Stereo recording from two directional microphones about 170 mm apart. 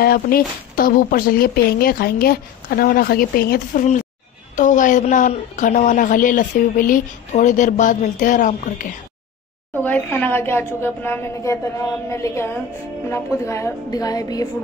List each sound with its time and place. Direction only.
0.0 s speech: 60° left (ahead or behind)
9.8 s a woman's voice: 10° left (ahead or behind)